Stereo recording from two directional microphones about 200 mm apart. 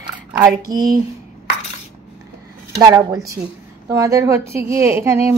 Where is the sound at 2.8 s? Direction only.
15° right (ahead or behind).